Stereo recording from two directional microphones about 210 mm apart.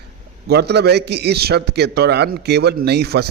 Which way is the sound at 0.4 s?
50° right (ahead or behind).